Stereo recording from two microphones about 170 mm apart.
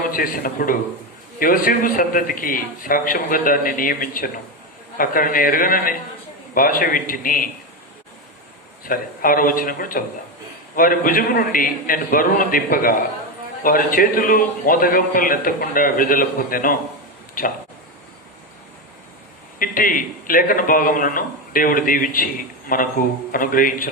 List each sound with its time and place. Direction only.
0.1 s a man's voice: 55° left (ahead or behind)
8.8 s a man's voice: 55° left (ahead or behind)
19.5 s a man's voice: 55° left (ahead or behind)